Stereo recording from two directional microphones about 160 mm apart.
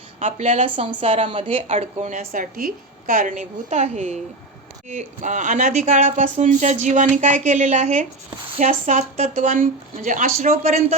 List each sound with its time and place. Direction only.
0.2 s a woman's voice: 45° right (ahead or behind)
0.8 s a woman's voice: 35° right (ahead or behind)